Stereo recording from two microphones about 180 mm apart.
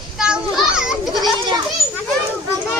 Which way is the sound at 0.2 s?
5° right (ahead or behind).